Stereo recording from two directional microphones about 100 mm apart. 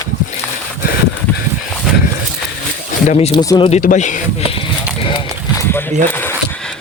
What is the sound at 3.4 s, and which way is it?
Speech, 45° left (ahead or behind).